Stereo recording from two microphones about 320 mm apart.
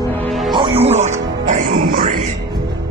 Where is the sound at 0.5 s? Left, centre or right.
Centre.